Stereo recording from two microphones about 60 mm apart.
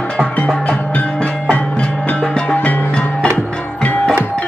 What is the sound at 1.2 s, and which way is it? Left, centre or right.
Music, centre.